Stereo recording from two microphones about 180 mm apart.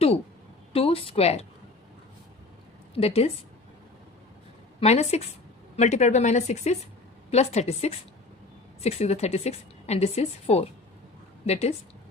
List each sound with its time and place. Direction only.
0.7 s a woman's voice: 30° left (ahead or behind)
2.9 s a woman's voice: 35° left (ahead or behind)
4.8 s a woman's voice: 35° left (ahead or behind)